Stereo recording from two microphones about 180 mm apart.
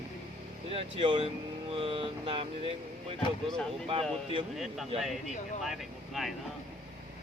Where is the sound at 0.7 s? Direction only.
30° right (ahead or behind).